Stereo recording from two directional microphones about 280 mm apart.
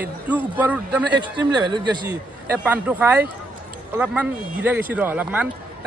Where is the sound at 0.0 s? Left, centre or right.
Centre.